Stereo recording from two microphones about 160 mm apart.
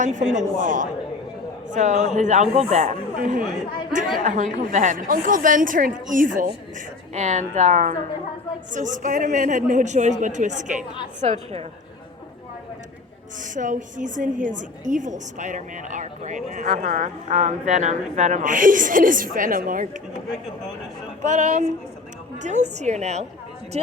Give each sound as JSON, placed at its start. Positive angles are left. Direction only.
{"t": 0.0, "sound": "a woman's voice", "side_deg": -50}
{"t": 13.4, "sound": "a woman's voice", "side_deg": -55}
{"t": 21.2, "sound": "a woman's voice", "side_deg": -50}